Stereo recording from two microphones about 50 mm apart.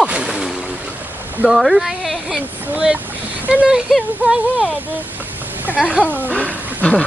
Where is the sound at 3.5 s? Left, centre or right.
Centre.